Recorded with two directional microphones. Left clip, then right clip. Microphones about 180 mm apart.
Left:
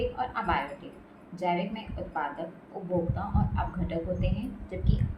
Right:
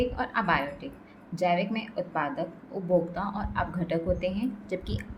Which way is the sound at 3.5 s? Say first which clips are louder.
Right 4 dB; 60° right (ahead or behind).